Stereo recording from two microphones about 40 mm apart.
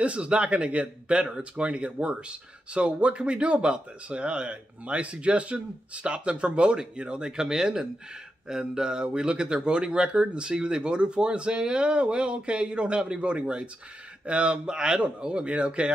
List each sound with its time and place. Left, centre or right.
0.0 s speech: right